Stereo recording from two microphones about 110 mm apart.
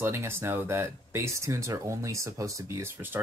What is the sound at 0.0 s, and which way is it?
Speech, 25° right (ahead or behind).